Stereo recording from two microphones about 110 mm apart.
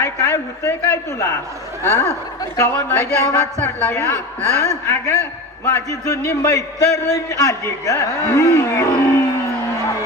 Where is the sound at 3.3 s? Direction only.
15° left (ahead or behind).